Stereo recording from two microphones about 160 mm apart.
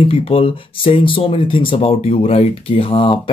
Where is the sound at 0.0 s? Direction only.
35° left (ahead or behind).